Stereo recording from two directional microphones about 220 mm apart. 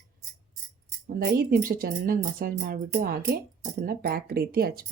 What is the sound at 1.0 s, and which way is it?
Speech, 40° right (ahead or behind).